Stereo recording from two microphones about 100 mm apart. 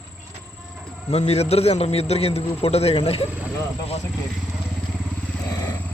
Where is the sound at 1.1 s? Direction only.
90° left.